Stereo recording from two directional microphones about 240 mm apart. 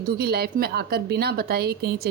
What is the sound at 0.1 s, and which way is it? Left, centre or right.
A woman's voice, right.